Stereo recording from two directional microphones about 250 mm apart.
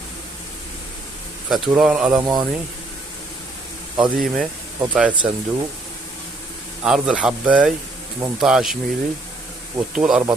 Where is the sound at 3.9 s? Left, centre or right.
Centre.